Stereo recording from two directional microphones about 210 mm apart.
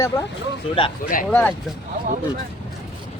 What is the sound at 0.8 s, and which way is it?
Speech, 25° left (ahead or behind).